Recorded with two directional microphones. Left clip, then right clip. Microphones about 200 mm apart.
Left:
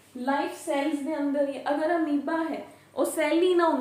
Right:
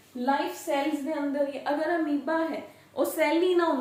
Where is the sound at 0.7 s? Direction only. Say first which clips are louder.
Right 1 dB; centre (ahead or behind).